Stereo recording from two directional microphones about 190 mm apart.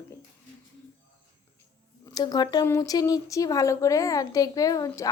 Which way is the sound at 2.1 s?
20° left (ahead or behind).